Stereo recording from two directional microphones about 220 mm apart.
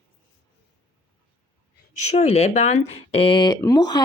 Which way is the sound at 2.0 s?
30° left (ahead or behind).